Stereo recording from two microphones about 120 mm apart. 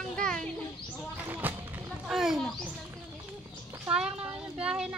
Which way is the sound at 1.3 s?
20° right (ahead or behind).